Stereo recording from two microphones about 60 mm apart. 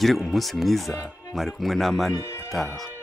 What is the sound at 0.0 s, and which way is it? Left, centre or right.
Speech, centre.